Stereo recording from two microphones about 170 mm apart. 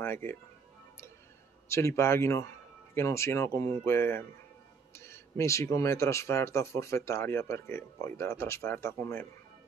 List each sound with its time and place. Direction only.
0.0 s speech: 15° left (ahead or behind)
1.7 s speech: 15° left (ahead or behind)